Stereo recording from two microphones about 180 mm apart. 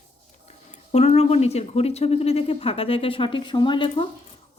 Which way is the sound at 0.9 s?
35° left (ahead or behind).